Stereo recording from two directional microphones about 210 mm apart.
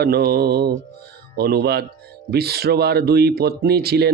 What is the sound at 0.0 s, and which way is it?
Speech, 50° right (ahead or behind).